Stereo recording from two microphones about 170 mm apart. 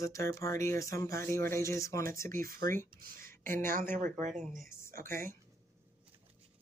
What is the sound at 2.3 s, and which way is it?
Speech, 55° right (ahead or behind).